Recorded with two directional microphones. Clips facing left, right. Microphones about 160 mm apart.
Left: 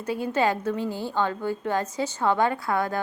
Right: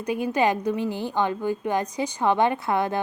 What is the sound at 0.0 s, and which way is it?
A woman's voice, 15° right (ahead or behind).